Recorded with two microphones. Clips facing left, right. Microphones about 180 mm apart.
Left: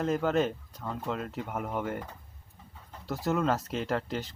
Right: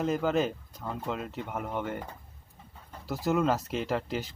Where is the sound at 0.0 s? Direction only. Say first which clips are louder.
Even; centre (ahead or behind).